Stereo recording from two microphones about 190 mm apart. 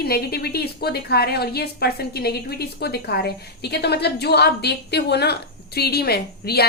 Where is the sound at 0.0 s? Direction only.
55° left (ahead or behind).